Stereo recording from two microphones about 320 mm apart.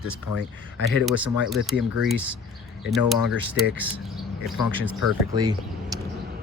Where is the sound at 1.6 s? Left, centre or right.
Centre.